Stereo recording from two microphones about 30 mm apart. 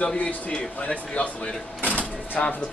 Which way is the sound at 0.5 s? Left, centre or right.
Left.